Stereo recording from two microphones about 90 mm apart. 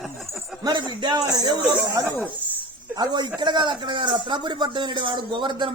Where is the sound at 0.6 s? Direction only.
50° right (ahead or behind).